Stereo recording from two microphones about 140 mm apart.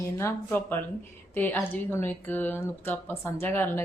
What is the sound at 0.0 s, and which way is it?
A woman's voice, 20° left (ahead or behind).